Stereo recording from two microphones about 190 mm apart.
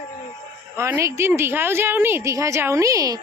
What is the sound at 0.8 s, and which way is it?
A woman's voice, 15° right (ahead or behind).